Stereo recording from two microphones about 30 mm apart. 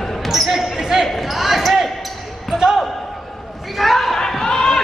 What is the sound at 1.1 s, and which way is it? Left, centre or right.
Basketball bounce, centre.